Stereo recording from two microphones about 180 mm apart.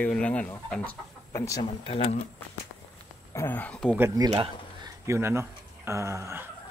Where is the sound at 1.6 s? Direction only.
30° left (ahead or behind).